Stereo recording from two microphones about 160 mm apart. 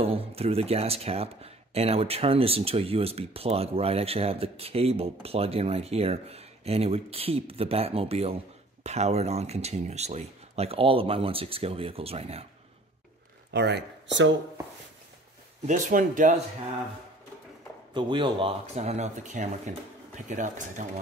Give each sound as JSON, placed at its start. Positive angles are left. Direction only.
{"t": 0.0, "sound": "speech", "side_deg": -40}
{"t": 13.5, "sound": "speech", "side_deg": -90}
{"t": 15.6, "sound": "speech", "side_deg": -55}
{"t": 17.9, "sound": "speech", "side_deg": -30}
{"t": 18.8, "sound": "speech", "side_deg": -45}